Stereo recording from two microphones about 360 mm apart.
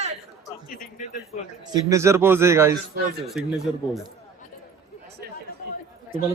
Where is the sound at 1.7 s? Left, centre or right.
Centre.